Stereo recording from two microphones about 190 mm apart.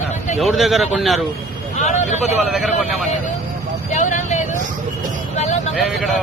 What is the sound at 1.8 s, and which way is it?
Speech, 40° left (ahead or behind).